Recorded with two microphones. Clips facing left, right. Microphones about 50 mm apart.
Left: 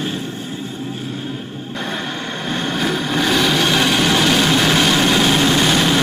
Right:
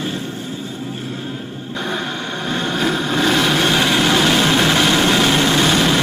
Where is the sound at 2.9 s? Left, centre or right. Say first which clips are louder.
Right 1 dB; right.